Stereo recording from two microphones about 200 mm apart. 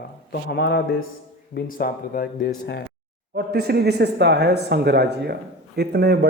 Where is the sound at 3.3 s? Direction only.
55° right (ahead or behind).